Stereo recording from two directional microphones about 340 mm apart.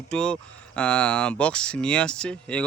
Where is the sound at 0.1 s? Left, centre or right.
Centre.